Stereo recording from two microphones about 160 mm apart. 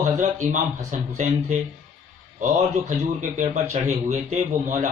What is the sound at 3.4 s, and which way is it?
Speech, 50° right (ahead or behind).